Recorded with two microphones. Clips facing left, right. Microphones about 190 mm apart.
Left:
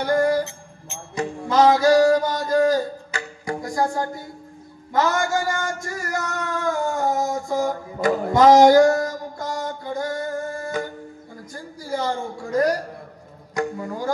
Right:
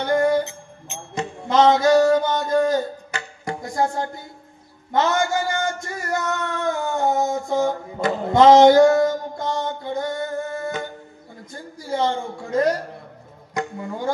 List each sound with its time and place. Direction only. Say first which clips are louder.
0.0 s music: right 1 dB; 25° right (ahead or behind)
4.9 s a man's voice: right 1 dB; 25° right (ahead or behind)
6.4 s a sound: even; 25° right (ahead or behind)
11.5 s a man's voice: right 2 dB; 25° right (ahead or behind)
13.6 s music: left 2 dB; 25° right (ahead or behind)